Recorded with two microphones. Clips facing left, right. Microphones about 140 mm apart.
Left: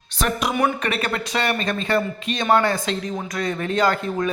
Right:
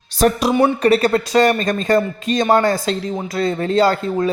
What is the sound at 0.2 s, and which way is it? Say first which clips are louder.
Speech: right 7 dB; 35° right (ahead or behind).